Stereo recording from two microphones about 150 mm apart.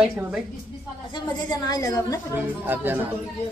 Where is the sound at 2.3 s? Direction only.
10° right (ahead or behind).